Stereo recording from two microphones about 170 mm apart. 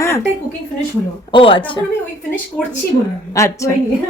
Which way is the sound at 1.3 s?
30° left (ahead or behind).